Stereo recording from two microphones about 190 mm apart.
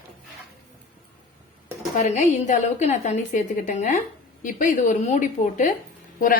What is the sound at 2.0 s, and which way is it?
A woman's voice, 40° left (ahead or behind).